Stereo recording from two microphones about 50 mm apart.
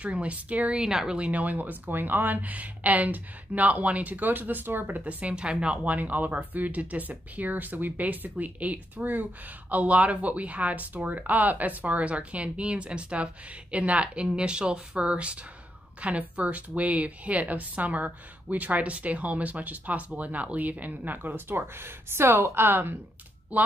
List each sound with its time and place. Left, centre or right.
0.0 s a woman's voice: right
0.8 s speech: centre
1.1 s speech: right
5.3 s a woman's voice: centre
5.9 s a woman's voice: right
23.5 s speech: right